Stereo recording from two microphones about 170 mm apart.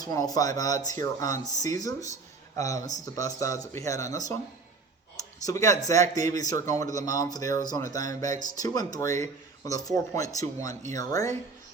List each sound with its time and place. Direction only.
0.0 s speech: 20° left (ahead or behind)
5.5 s speech: 20° left (ahead or behind)